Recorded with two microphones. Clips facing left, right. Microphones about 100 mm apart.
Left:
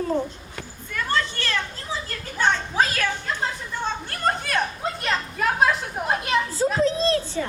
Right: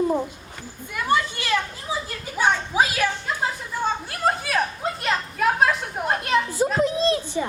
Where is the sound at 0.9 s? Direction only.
15° right (ahead or behind).